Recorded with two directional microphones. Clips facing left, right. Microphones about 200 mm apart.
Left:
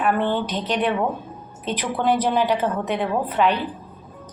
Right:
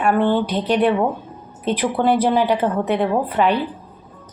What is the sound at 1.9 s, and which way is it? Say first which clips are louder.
Speech: right 2 dB; 10° right (ahead or behind).